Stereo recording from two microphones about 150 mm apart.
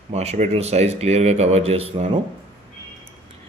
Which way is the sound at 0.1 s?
45° right (ahead or behind).